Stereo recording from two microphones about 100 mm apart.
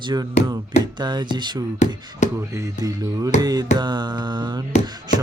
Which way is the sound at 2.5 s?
35° right (ahead or behind).